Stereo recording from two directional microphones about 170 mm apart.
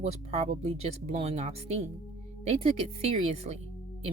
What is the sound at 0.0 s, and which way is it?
Speech, 40° right (ahead or behind).